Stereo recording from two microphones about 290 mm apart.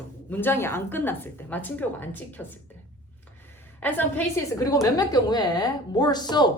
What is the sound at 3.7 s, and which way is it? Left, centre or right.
A woman's voice, centre.